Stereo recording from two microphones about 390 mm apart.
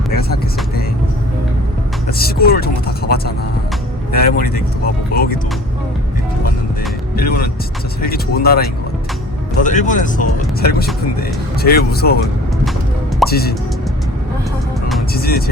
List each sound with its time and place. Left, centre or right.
0.1 s vehicle: left
2.1 s vehicle: left
7.2 s vehicle: left
9.6 s speech: centre
13.2 s music: centre
15.1 s speech: left